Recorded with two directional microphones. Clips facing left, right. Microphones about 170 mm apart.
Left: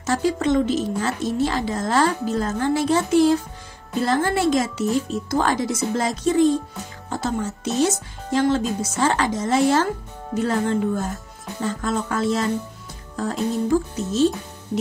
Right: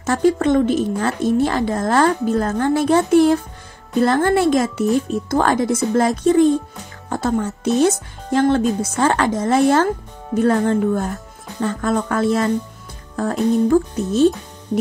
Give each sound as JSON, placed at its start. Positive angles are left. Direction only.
{"t": 0.0, "sound": "speech", "side_deg": -55}